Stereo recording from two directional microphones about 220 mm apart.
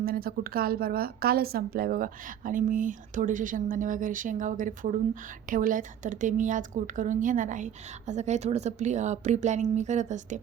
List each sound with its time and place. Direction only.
0.0 s a woman's voice: 45° right (ahead or behind)